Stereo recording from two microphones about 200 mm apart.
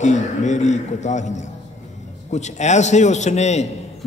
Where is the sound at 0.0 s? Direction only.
35° left (ahead or behind).